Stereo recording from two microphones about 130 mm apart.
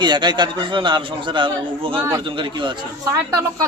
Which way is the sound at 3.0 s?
25° right (ahead or behind).